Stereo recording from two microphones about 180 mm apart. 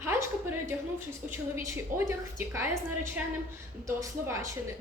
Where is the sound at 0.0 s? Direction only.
15° right (ahead or behind).